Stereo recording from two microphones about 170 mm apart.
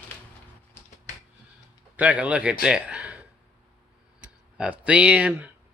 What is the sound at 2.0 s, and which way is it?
A man's voice, 5° right (ahead or behind).